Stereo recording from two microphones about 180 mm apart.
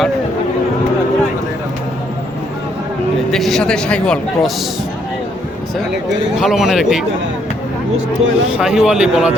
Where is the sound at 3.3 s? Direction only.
Centre (ahead or behind).